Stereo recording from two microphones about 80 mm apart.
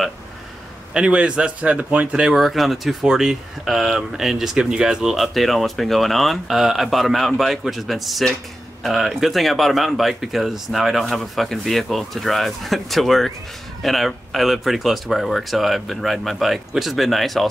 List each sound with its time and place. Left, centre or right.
0.9 s speech: centre